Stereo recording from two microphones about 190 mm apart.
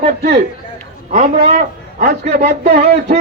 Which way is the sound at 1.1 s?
40° right (ahead or behind).